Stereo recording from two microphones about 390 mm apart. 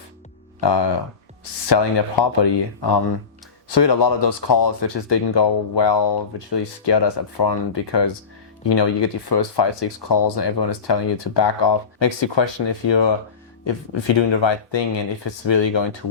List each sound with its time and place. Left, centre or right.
1.7 s speech: left